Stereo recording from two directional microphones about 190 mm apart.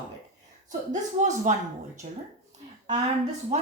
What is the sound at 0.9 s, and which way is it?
Speech, 40° right (ahead or behind).